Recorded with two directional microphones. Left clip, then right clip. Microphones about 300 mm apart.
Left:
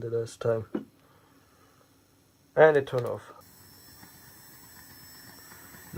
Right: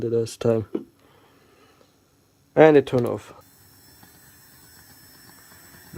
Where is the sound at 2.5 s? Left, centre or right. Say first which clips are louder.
Right 5 dB; right.